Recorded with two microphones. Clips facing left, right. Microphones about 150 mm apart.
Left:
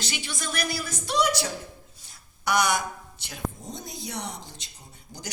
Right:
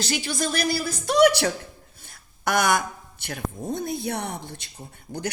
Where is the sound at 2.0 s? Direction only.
50° right (ahead or behind).